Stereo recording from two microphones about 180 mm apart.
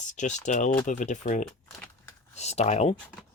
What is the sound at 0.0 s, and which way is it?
Speech, 45° left (ahead or behind).